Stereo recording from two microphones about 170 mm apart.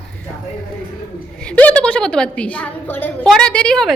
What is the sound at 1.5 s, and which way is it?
A woman's voice, 10° left (ahead or behind).